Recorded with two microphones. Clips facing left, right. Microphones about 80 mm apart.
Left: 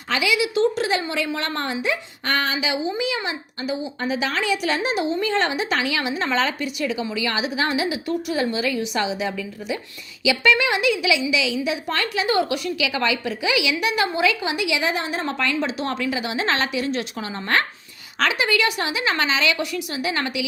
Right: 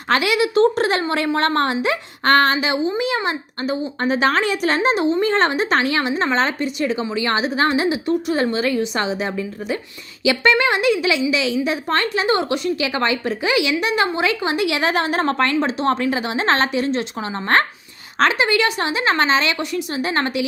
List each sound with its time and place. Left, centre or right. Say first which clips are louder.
0.1 s a woman's voice: right 4 dB; right
15.5 s a woman's voice: right 6 dB; right